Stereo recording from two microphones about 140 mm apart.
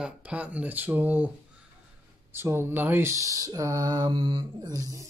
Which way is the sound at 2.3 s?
15° right (ahead or behind).